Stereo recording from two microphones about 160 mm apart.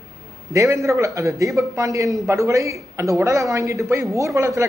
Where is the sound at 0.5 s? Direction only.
20° right (ahead or behind).